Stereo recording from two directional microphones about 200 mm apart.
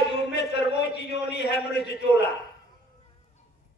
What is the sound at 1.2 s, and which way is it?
Speech, 60° left (ahead or behind).